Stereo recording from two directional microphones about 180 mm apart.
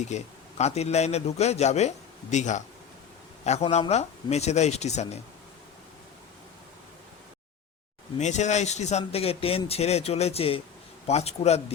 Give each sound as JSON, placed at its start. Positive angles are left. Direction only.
{"t": 0.0, "sound": "a man's voice", "side_deg": 40}
{"t": 8.2, "sound": "a man's voice", "side_deg": 40}